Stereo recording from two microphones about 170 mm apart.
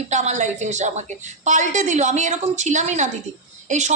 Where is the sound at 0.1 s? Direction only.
45° right (ahead or behind).